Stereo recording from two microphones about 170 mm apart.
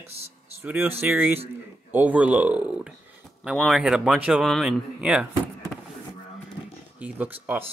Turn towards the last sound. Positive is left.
turn(degrees=-10)  # may be behind; listen again after turning